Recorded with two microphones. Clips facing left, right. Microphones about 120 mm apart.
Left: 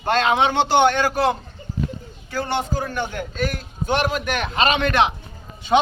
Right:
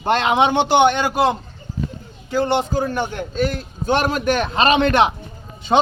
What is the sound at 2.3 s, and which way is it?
A man's voice, 20° right (ahead or behind).